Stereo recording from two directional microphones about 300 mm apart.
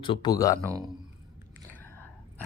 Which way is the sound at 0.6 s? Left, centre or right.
Centre.